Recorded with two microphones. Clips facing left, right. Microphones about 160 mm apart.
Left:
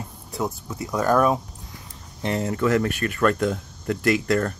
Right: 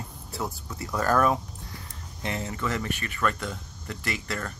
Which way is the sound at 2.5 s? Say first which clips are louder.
Left 9 dB; 55° left (ahead or behind).